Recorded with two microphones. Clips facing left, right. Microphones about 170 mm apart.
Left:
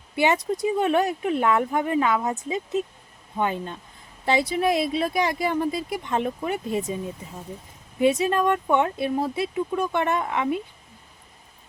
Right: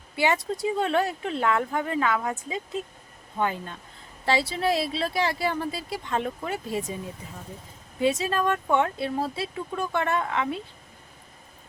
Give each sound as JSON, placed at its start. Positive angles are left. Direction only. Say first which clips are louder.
{"t": 0.2, "sound": "speech", "louder": "left 3 dB", "side_deg": 20}
{"t": 3.3, "sound": "speech", "louder": "left 2 dB", "side_deg": 20}
{"t": 8.0, "sound": "speech", "louder": "left 4 dB", "side_deg": 20}